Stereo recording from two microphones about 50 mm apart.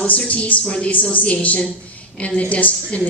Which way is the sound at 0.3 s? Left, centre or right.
Left.